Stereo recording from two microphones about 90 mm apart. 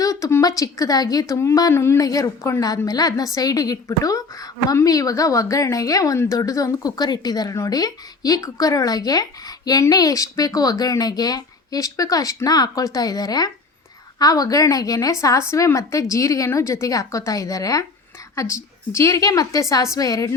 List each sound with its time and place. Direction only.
0.0 s a sound: 40° left (ahead or behind)
0.4 s a woman's voice: 40° left (ahead or behind)
2.0 s a woman's voice: 40° left (ahead or behind)